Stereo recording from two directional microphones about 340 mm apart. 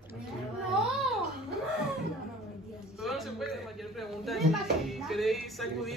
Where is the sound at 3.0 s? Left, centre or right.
Centre.